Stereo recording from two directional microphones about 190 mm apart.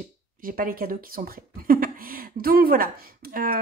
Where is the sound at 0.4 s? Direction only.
50° right (ahead or behind).